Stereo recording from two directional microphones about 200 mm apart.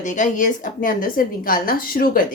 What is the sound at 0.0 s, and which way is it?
A woman's voice, 40° left (ahead or behind).